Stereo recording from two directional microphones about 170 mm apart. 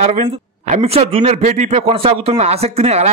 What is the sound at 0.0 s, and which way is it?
A man's voice, 40° right (ahead or behind).